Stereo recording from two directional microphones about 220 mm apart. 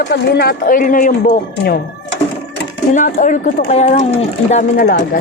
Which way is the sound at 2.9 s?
35° left (ahead or behind).